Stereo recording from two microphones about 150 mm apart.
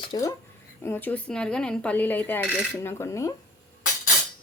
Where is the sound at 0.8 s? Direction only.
15° left (ahead or behind).